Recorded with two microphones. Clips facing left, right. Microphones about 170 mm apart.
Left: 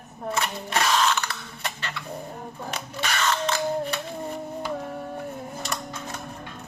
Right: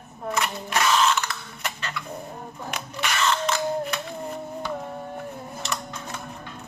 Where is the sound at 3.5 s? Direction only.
35° left (ahead or behind).